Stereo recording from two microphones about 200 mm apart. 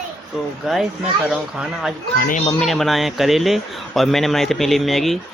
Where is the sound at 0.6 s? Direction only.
Centre (ahead or behind).